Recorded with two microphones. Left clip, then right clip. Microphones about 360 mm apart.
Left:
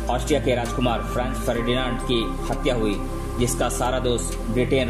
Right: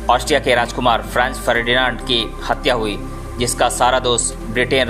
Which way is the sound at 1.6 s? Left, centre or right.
Centre.